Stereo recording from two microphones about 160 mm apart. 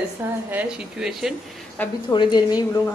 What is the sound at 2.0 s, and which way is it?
Speech, 25° left (ahead or behind).